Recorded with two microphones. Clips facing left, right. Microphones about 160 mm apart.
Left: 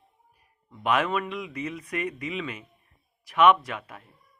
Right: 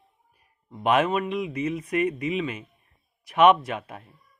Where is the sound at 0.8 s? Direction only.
25° right (ahead or behind).